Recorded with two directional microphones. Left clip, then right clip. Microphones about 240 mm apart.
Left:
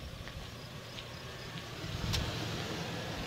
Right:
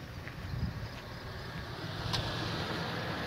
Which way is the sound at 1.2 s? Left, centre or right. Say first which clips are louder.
Right 1 dB; left.